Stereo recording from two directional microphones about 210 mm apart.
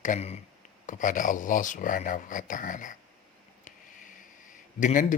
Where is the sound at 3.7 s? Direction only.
40° left (ahead or behind).